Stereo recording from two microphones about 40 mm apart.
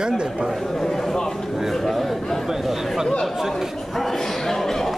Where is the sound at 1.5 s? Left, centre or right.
Centre.